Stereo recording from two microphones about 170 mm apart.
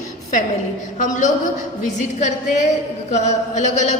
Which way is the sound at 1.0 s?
45° left (ahead or behind).